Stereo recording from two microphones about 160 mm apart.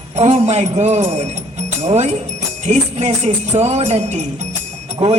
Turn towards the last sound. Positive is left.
turn(degrees=-35)  # may be behind; listen again after turning